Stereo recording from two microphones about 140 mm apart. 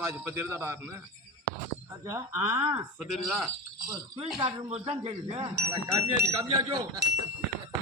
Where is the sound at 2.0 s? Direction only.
20° right (ahead or behind).